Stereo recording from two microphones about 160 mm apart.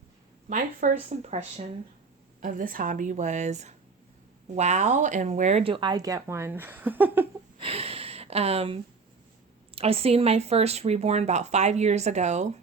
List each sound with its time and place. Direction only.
0.5 s speech: 60° right (ahead or behind)
1.2 s speech: 45° right (ahead or behind)
2.4 s speech: 60° right (ahead or behind); by 7.3 s 10° right (ahead or behind)
7.6 s a sound: 40° right (ahead or behind)
9.7 s speech: 40° right (ahead or behind)